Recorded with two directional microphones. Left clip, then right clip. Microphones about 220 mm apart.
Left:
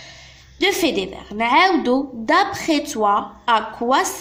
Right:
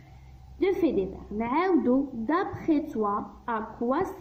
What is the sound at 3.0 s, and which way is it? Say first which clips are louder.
A woman's voice: left 11 dB; 30° left (ahead or behind).